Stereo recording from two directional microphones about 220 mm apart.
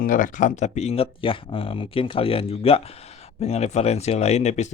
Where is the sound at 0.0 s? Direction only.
35° left (ahead or behind).